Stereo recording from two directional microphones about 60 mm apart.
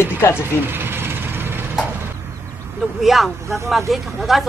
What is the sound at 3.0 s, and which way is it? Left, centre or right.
Speech, centre.